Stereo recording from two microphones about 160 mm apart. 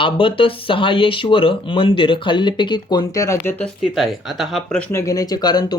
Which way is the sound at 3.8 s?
Centre (ahead or behind).